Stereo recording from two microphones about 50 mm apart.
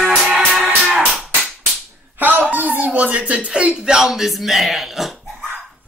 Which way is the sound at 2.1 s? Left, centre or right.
Right.